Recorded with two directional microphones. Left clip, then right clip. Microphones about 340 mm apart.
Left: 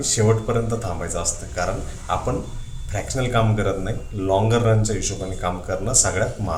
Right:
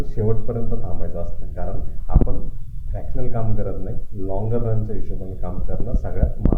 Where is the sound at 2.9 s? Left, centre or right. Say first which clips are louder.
Left 8 dB; centre.